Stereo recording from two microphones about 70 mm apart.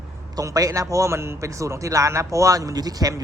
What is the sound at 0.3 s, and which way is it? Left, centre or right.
A man's voice, right.